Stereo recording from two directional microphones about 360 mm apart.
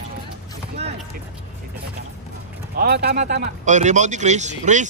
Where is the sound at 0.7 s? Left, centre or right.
Centre.